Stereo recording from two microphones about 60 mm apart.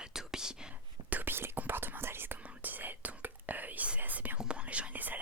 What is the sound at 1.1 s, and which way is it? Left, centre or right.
Whispering, right.